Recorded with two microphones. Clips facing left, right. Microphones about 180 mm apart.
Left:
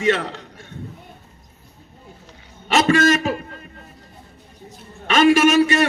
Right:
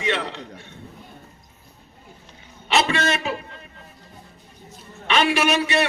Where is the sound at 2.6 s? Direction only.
45° left (ahead or behind).